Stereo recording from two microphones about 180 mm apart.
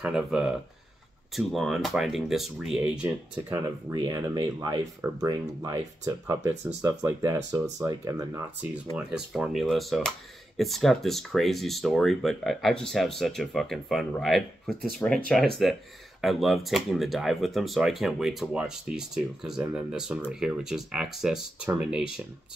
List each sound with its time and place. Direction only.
0.0 s speech: 5° right (ahead or behind)
3.9 s speech: 20° right (ahead or behind)
8.9 s speech: 5° right (ahead or behind)